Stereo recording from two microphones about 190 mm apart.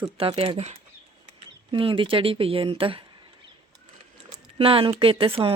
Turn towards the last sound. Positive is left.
turn(degrees=-30)  # may be behind; listen again after turning